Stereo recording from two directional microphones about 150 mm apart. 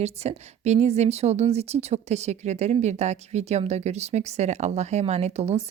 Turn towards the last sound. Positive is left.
turn(degrees=-45)  # may be behind; listen again after turning